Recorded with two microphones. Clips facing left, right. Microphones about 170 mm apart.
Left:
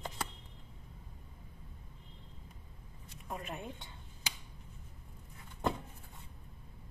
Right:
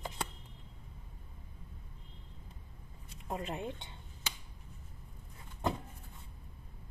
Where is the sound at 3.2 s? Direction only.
20° right (ahead or behind).